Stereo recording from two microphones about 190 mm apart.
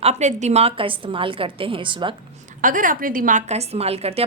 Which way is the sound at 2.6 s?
45° right (ahead or behind).